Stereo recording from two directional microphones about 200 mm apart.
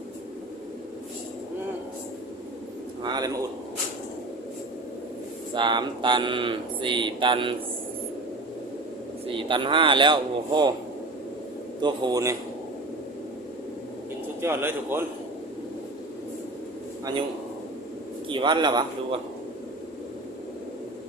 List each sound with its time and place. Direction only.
3.0 s a sound: 20° right (ahead or behind)
5.5 s speech: 25° right (ahead or behind)
9.2 s speech: 25° right (ahead or behind)
11.8 s speech: 20° right (ahead or behind)
14.4 s a man's voice: 10° right (ahead or behind)
18.3 s speech: 25° right (ahead or behind)